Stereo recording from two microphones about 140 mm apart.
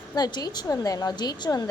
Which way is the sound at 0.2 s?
30° left (ahead or behind).